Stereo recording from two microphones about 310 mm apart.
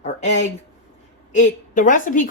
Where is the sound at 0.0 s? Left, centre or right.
Left.